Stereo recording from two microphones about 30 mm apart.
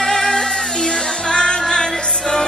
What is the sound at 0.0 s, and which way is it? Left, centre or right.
Music, centre.